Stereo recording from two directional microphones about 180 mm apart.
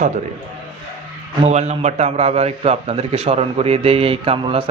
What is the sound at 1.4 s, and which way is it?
Speech, 40° right (ahead or behind).